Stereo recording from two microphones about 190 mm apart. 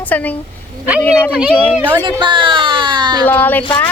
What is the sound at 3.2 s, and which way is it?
Speech, 10° left (ahead or behind).